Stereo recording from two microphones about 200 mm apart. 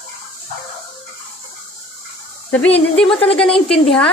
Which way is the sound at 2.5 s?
5° left (ahead or behind).